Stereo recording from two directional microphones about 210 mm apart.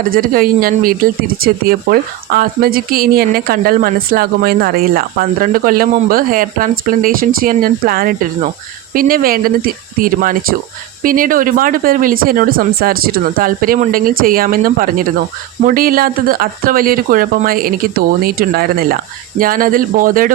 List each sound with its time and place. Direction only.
0.0 s speech: 45° right (ahead or behind)